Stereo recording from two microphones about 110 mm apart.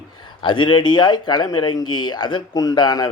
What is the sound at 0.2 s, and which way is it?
A man's voice, 45° left (ahead or behind).